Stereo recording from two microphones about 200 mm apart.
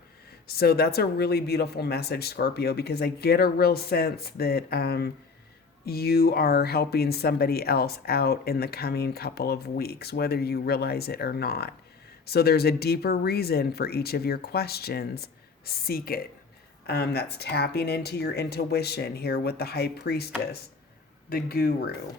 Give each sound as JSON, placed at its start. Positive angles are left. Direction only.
{"t": 0.4, "sound": "speech", "side_deg": 50}